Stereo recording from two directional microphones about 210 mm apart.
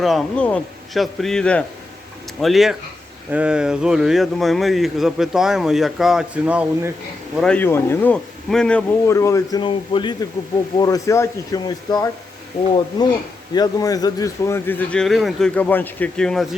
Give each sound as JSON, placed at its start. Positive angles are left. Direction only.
{"t": 0.0, "sound": "speech", "side_deg": 0}
{"t": 7.3, "sound": "speech", "side_deg": 5}
{"t": 13.5, "sound": "speech", "side_deg": 20}